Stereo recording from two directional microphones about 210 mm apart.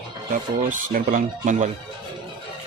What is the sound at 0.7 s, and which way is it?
Speech, 40° right (ahead or behind).